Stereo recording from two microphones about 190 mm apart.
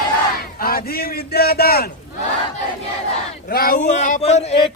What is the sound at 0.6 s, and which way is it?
A man's voice, 50° left (ahead or behind).